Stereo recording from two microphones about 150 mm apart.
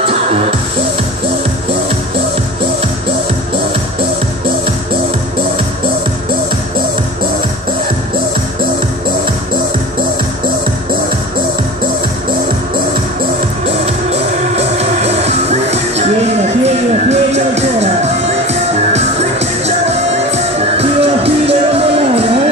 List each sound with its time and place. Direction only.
0.0 s music: 40° right (ahead or behind)
13.7 s music: 45° right (ahead or behind)
17.1 s music: 45° right (ahead or behind)
20.2 s music: 40° right (ahead or behind)